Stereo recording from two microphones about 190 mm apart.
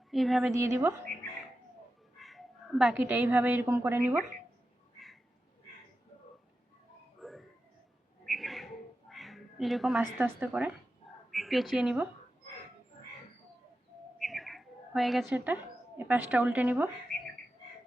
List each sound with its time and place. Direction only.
0.1 s a woman's voice: centre (ahead or behind)
0.5 s a woman's voice: 15° right (ahead or behind)
2.2 s a woman's voice: centre (ahead or behind)
7.2 s a sound: centre (ahead or behind)
8.2 s bird: centre (ahead or behind)
10.2 s a woman's voice: 10° right (ahead or behind)
14.2 s speech: centre (ahead or behind)